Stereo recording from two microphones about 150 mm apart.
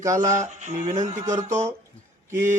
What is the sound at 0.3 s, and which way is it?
Speech, 55° right (ahead or behind).